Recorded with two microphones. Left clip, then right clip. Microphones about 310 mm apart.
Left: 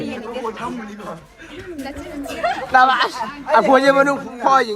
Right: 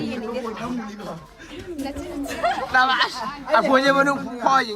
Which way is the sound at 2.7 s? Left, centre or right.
Centre.